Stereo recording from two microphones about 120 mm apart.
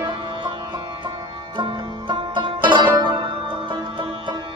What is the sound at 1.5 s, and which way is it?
Music, 40° right (ahead or behind).